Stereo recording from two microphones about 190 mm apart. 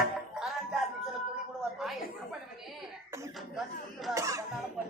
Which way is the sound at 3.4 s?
Centre (ahead or behind).